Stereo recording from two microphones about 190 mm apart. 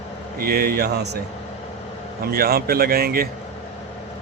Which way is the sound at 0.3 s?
55° right (ahead or behind).